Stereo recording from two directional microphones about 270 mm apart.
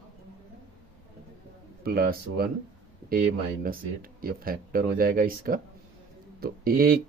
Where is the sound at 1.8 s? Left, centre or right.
Right.